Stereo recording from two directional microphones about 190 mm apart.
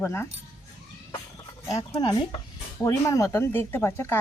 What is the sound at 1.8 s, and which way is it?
Speech, 25° left (ahead or behind).